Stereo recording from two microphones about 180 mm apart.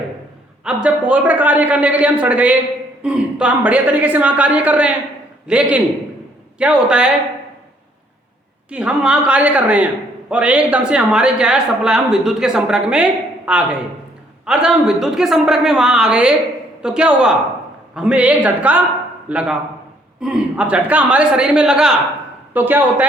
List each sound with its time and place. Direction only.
0.6 s a man's voice: 5° right (ahead or behind)
8.7 s a man's voice: 5° right (ahead or behind)